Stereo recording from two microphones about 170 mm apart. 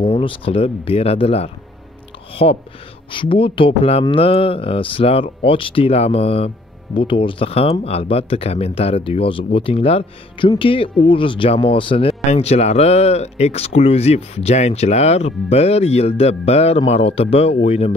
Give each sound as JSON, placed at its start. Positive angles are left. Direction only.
{"t": 0.0, "sound": "speech", "side_deg": 30}
{"t": 3.1, "sound": "speech", "side_deg": 30}